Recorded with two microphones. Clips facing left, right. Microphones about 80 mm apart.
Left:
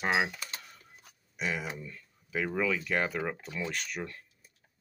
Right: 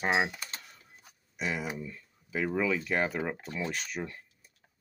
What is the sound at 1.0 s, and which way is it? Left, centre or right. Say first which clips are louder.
Speech: even; centre.